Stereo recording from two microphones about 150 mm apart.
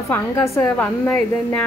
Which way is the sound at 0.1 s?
10° left (ahead or behind).